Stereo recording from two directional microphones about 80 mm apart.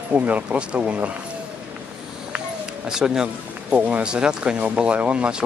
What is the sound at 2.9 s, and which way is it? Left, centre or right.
Speech, centre.